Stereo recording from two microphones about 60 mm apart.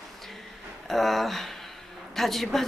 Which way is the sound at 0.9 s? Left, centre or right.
Centre.